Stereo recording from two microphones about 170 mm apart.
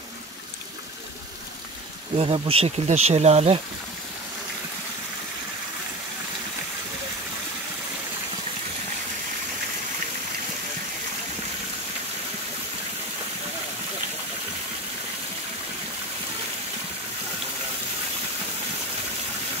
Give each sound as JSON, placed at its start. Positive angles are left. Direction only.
{"t": 2.1, "sound": "speech", "side_deg": -35}